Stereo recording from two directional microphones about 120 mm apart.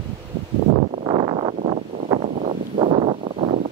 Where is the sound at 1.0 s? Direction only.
45° right (ahead or behind).